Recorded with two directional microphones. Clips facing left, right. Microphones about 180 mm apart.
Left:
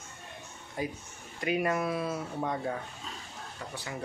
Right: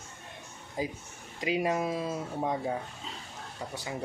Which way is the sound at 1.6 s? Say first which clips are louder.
Even; 20° right (ahead or behind).